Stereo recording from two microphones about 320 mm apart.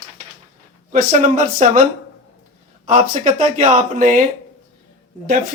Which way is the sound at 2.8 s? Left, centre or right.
Centre.